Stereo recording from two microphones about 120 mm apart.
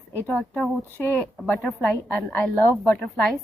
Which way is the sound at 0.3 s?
10° left (ahead or behind).